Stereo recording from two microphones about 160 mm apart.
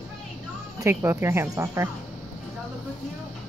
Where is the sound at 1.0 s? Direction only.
15° right (ahead or behind).